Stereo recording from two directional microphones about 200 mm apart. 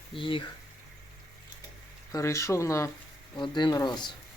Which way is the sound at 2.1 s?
15° left (ahead or behind).